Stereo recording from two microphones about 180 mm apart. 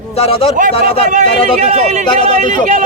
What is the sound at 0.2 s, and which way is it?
Speech, 30° left (ahead or behind).